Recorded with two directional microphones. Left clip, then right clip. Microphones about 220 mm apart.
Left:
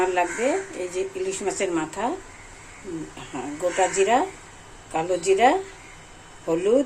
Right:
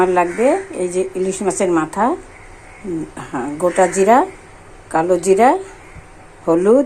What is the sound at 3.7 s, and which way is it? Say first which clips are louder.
Speech: right 8 dB; 25° right (ahead or behind).